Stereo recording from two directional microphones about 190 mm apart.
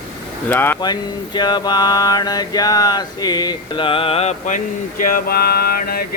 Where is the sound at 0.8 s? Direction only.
20° left (ahead or behind).